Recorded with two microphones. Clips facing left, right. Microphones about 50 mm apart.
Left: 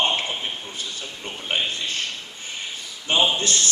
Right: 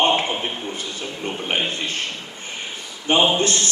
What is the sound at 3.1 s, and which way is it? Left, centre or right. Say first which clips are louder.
Speech: right 4 dB; right.